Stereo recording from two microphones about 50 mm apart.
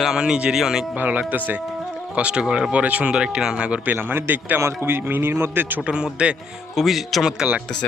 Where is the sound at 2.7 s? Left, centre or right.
Right.